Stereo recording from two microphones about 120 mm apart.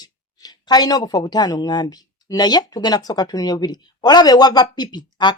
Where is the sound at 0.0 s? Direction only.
35° left (ahead or behind).